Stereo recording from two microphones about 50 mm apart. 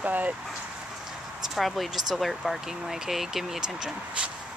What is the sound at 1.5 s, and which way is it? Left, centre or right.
Speech, centre.